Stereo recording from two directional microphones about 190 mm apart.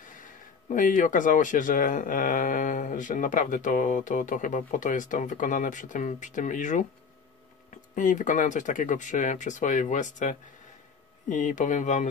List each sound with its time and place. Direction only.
0.0 s speech: 45° left (ahead or behind)